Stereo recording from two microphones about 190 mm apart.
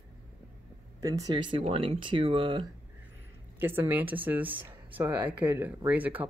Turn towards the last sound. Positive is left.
turn(degrees=-10)  # may be behind; listen again after turning